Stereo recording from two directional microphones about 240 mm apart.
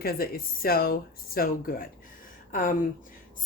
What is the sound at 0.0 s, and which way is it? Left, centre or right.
A woman's voice, left.